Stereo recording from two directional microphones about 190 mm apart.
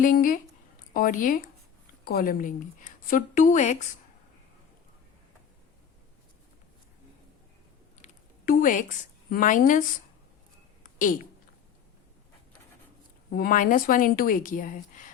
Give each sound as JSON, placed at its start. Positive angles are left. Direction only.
{"t": 0.0, "sound": "a woman's voice", "side_deg": 45}
{"t": 8.0, "sound": "speech", "side_deg": 45}
{"t": 10.8, "sound": "a sound", "side_deg": 45}
{"t": 13.3, "sound": "a woman's voice", "side_deg": 45}